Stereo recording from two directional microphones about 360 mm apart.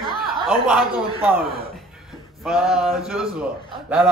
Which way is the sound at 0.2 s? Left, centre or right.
Centre.